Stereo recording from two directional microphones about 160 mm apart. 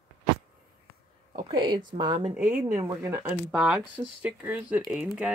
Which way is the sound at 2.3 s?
10° right (ahead or behind).